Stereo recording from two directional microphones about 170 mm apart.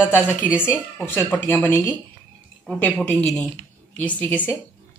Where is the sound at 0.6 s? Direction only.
15° left (ahead or behind).